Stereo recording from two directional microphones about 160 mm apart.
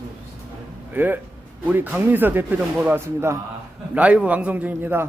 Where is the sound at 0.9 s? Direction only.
10° right (ahead or behind).